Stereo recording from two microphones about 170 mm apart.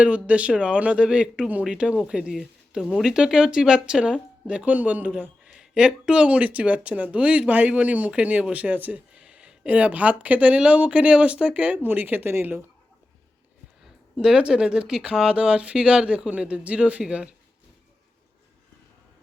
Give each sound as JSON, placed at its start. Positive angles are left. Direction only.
{"t": 0.0, "sound": "speech", "side_deg": -10}
{"t": 14.2, "sound": "speech", "side_deg": -5}